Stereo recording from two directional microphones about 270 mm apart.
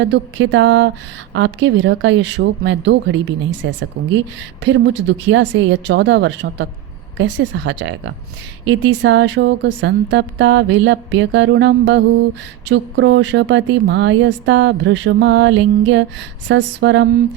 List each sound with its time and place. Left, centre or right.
0.0 s speech: right